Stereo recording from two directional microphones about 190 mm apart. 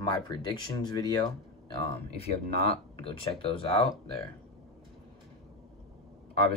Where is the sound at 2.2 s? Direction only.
30° left (ahead or behind).